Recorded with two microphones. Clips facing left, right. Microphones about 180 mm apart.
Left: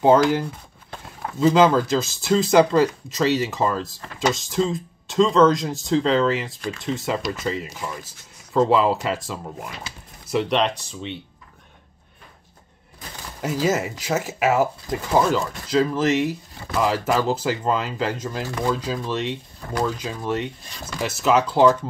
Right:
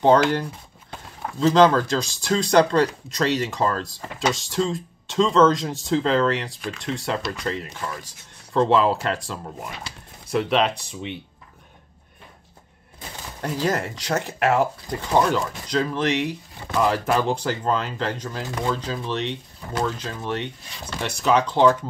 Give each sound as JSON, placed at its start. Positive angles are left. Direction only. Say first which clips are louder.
{"t": 0.0, "sound": "speech", "louder": "left 1 dB", "side_deg": 5}
{"t": 13.4, "sound": "speech", "louder": "left 2 dB", "side_deg": 5}